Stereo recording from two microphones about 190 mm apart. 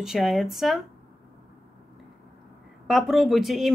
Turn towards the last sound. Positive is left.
turn(degrees=0)  # may be behind; listen again after turning